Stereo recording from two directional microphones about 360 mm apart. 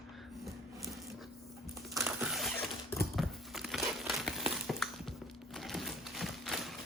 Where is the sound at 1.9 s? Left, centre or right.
Centre.